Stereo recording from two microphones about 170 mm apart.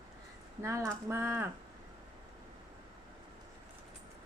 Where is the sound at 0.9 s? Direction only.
15° right (ahead or behind).